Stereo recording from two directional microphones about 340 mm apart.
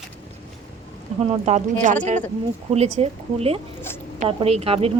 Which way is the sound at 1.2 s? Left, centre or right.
Centre.